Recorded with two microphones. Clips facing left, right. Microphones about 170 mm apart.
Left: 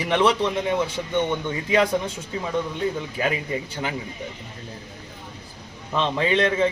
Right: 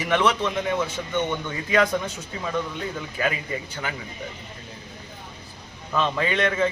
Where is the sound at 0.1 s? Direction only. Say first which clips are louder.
Left 2 dB; 25° left (ahead or behind).